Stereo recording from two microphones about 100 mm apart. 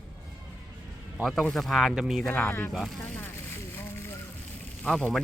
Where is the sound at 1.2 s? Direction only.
Centre (ahead or behind).